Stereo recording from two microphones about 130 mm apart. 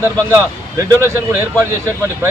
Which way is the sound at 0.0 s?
20° right (ahead or behind).